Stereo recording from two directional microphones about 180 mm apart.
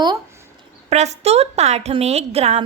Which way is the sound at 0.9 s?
40° right (ahead or behind).